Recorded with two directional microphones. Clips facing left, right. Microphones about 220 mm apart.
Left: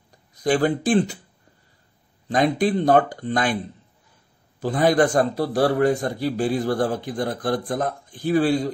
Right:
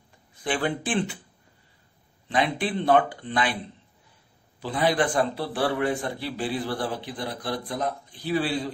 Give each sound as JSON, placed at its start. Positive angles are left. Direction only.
{"t": 0.3, "sound": "speech", "side_deg": 40}
{"t": 2.2, "sound": "a man's voice", "side_deg": 40}
{"t": 4.6, "sound": "a man's voice", "side_deg": 45}